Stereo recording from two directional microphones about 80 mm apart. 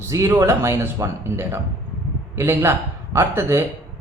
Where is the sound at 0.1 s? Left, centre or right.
Right.